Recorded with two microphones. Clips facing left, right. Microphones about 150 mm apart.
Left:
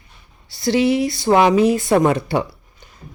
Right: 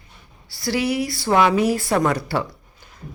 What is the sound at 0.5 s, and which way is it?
A woman's voice, 20° left (ahead or behind).